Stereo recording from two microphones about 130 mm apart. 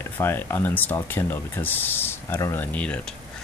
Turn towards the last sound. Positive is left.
turn(degrees=10)  # may be behind; listen again after turning